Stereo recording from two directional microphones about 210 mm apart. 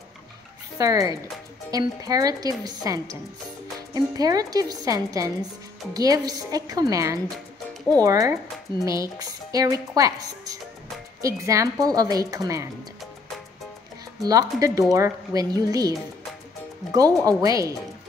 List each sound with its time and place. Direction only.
0.7 s speech: 15° right (ahead or behind)
14.2 s speech: 15° right (ahead or behind)
16.9 s speech: 15° right (ahead or behind)